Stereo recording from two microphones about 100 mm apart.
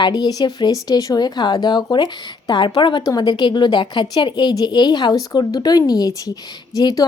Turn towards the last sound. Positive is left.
turn(degrees=40)  # may be behind; listen again after turning